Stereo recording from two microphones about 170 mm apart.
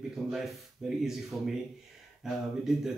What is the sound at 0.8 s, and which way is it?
Speech, 5° right (ahead or behind).